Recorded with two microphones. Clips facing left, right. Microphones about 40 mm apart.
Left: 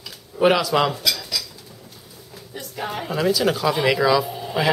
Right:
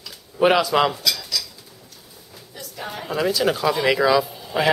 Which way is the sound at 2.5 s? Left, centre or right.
Centre.